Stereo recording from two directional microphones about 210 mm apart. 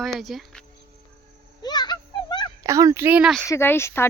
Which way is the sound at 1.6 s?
20° left (ahead or behind).